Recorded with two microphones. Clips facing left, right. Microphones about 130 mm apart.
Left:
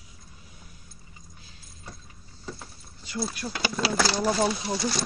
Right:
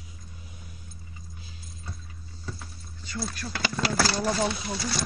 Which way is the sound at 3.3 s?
10° left (ahead or behind).